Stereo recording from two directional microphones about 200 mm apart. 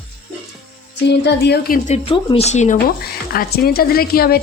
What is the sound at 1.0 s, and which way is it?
A woman's voice, 55° left (ahead or behind).